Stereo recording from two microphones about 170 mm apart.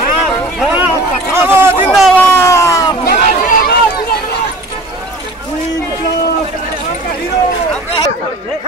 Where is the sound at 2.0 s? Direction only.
10° left (ahead or behind).